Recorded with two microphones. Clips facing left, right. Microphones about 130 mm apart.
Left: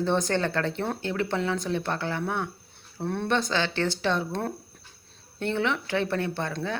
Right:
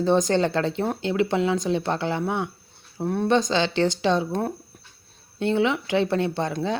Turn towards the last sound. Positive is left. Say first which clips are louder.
# right 5 dB
turn(degrees=-20)  # may be behind; listen again after turning